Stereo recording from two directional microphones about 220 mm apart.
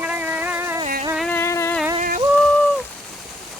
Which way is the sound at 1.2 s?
10° left (ahead or behind).